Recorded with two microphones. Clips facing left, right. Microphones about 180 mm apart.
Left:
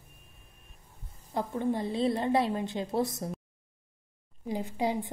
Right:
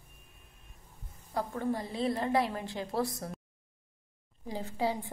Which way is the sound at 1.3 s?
25° left (ahead or behind).